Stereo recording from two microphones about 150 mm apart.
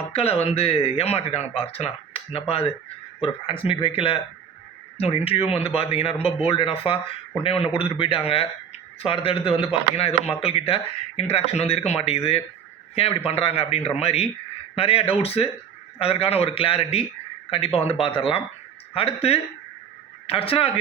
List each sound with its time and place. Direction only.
0.1 s speech: 40° left (ahead or behind)